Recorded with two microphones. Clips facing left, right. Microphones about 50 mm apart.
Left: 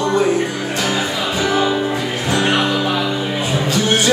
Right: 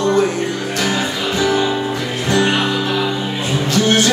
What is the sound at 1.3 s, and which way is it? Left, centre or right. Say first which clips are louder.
Music: even; centre.